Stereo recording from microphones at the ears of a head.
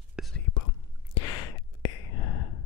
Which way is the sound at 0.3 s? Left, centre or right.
Left.